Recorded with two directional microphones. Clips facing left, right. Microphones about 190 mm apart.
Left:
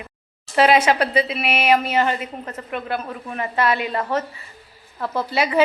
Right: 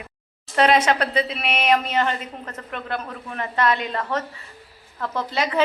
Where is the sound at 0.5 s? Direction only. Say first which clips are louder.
Left 2 dB; 5° left (ahead or behind).